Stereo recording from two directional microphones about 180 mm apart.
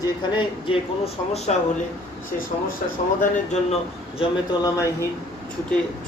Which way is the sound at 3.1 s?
40° left (ahead or behind).